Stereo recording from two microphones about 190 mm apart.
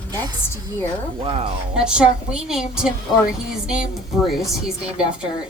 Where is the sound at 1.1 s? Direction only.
30° right (ahead or behind).